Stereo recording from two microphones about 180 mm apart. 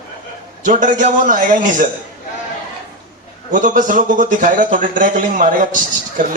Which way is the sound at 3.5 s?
45° right (ahead or behind).